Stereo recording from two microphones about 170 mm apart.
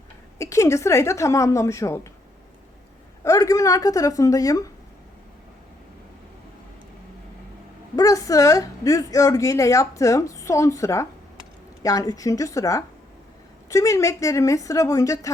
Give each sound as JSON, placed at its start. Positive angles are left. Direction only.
{"t": 0.3, "sound": "a woman's voice", "side_deg": 15}
{"t": 3.2, "sound": "a woman's voice", "side_deg": 20}
{"t": 7.9, "sound": "a woman's voice", "side_deg": 20}